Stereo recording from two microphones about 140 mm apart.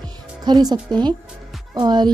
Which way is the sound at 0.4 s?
30° right (ahead or behind).